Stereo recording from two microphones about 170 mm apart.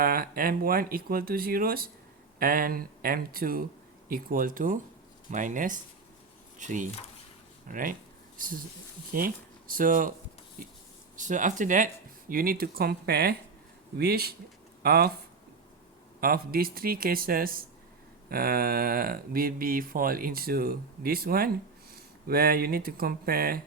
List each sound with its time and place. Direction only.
0.0 s speech: 60° right (ahead or behind)
11.2 s speech: 50° right (ahead or behind)
12.3 s speech: 60° right (ahead or behind)
16.2 s speech: 60° right (ahead or behind)